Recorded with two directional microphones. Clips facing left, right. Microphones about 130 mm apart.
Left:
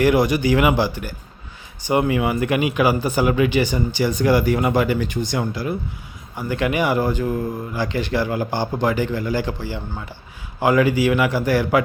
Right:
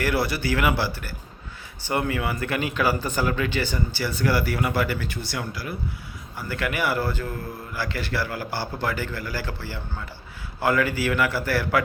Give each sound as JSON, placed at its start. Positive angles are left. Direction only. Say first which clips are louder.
{"t": 0.0, "sound": "speech", "louder": "left 8 dB", "side_deg": 15}